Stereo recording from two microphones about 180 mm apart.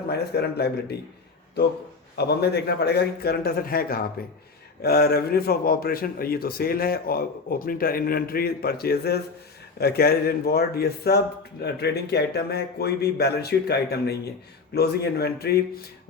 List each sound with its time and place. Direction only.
0.1 s a man's voice: 65° left (ahead or behind)
2.1 s a man's voice: 65° left (ahead or behind)